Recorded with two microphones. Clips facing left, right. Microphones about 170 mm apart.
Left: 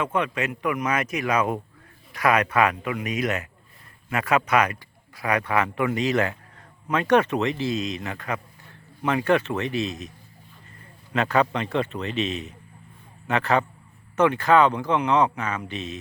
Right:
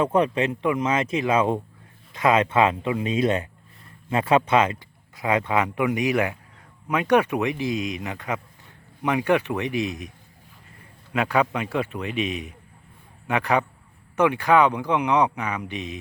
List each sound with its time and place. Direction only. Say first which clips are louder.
0.0 s a man's voice: right 5 dB; 35° right (ahead or behind); by 10.1 s 15° right (ahead or behind)
11.1 s a man's voice: even; 10° right (ahead or behind)